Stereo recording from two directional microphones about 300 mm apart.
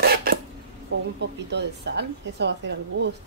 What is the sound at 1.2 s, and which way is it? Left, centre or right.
Speech, right.